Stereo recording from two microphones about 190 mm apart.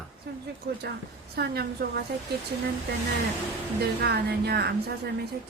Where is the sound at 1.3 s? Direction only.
55° right (ahead or behind).